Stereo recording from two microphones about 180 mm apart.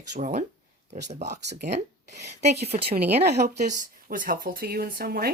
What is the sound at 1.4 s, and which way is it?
Speech, 60° right (ahead or behind).